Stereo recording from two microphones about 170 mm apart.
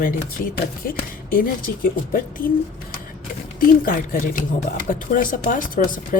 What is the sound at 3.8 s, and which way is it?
Speech, 55° left (ahead or behind).